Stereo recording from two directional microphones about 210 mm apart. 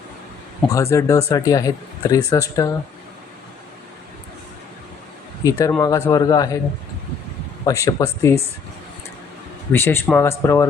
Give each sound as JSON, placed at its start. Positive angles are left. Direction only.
{"t": 0.7, "sound": "speech", "side_deg": 15}
{"t": 5.4, "sound": "speech", "side_deg": 15}
{"t": 7.6, "sound": "speech", "side_deg": 15}
{"t": 9.7, "sound": "speech", "side_deg": 10}